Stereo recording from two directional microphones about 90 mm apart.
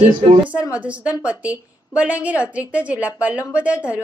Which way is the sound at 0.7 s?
15° right (ahead or behind).